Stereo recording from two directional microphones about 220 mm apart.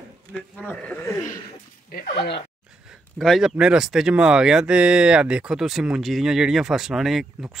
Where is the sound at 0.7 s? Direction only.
5° left (ahead or behind).